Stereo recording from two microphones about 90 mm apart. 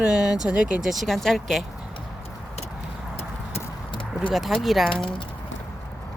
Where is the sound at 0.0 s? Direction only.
10° right (ahead or behind).